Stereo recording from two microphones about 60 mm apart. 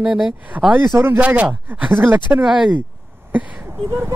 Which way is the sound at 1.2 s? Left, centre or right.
Right.